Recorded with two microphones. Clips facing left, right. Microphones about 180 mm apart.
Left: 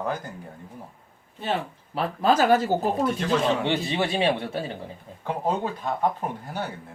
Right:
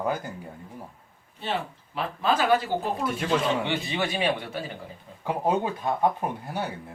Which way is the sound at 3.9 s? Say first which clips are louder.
Left 3 dB; 30° left (ahead or behind).